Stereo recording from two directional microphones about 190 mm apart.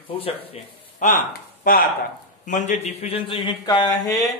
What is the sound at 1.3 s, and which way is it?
Speech, 50° left (ahead or behind).